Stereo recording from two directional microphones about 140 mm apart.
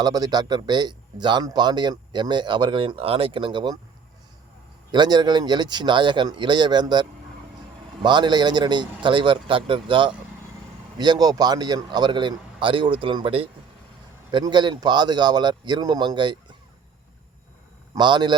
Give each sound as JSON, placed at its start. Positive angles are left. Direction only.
{"t": 0.0, "sound": "a man's voice", "side_deg": -25}
{"t": 4.9, "sound": "a man's voice", "side_deg": -30}
{"t": 17.9, "sound": "a man's voice", "side_deg": -30}